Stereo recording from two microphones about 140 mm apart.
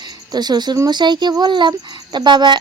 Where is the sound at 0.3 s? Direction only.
30° right (ahead or behind).